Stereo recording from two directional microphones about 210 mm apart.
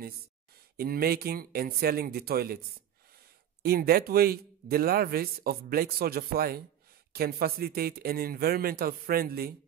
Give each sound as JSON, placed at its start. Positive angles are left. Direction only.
{"t": 0.7, "sound": "speech", "side_deg": -45}
{"t": 3.6, "sound": "speech", "side_deg": -45}